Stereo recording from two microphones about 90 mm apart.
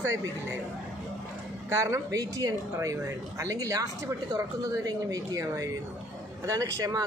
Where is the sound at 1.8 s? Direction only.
35° right (ahead or behind).